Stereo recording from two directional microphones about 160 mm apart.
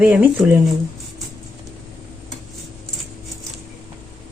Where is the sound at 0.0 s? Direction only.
10° right (ahead or behind).